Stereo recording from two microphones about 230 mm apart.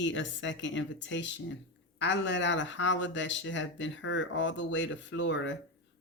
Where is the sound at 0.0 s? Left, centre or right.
Left.